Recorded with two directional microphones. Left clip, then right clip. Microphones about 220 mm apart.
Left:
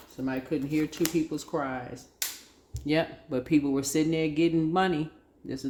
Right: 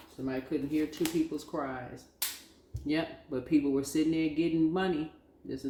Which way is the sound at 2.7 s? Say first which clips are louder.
Left 5 dB; 50° left (ahead or behind).